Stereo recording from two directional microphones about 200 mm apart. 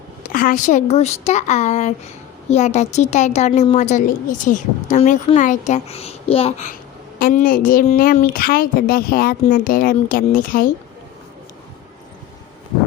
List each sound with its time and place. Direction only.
0.2 s a woman's voice: 40° left (ahead or behind)
7.2 s a woman's voice: 45° left (ahead or behind)